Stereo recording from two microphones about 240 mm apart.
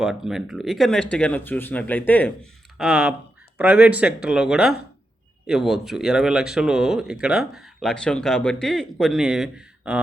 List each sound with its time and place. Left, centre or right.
0.0 s speech: centre